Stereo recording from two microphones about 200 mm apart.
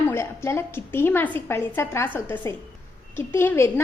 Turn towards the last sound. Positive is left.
turn(degrees=10)  # may be behind; listen again after turning